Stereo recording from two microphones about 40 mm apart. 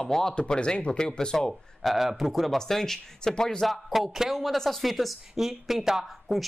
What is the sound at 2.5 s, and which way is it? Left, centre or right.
Speech, centre.